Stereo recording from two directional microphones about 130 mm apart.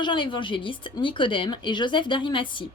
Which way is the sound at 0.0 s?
40° left (ahead or behind).